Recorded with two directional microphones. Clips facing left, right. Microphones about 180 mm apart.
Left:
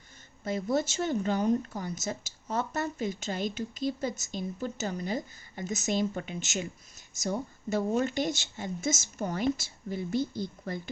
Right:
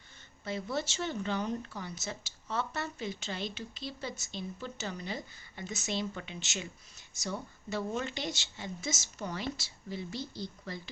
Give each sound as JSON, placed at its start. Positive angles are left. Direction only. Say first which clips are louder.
{"t": 0.4, "sound": "speech", "louder": "left 6 dB", "side_deg": 45}